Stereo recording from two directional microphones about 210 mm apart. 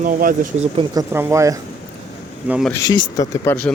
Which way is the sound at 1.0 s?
10° right (ahead or behind).